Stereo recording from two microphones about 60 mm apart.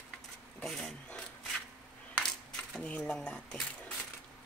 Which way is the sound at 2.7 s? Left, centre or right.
Centre.